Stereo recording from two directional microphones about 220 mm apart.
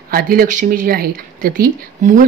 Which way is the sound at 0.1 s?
45° right (ahead or behind).